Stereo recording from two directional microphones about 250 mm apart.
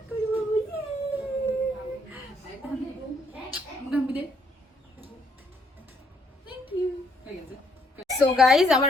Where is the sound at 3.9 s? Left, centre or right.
Centre.